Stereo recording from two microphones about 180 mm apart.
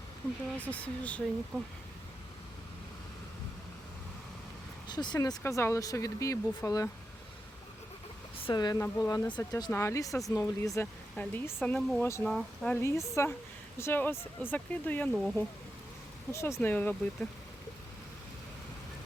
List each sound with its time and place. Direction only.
0.6 s speech: 10° left (ahead or behind)
4.9 s speech: 25° left (ahead or behind)
8.4 s speech: 20° left (ahead or behind)
10.1 s speech: centre (ahead or behind)
10.3 s speech: 20° left (ahead or behind)
11.1 s speech: 5° left (ahead or behind)
12.0 s speech: 15° left (ahead or behind)
12.3 s speech: centre (ahead or behind)
12.7 s speech: 15° left (ahead or behind)
16.3 s speech: 15° left (ahead or behind)